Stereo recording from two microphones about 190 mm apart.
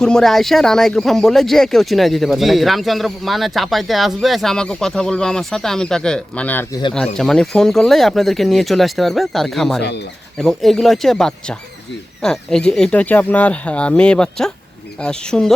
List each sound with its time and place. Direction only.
0.0 s speech: 5° left (ahead or behind)